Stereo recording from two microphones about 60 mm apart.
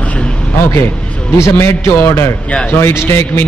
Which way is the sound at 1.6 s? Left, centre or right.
Left.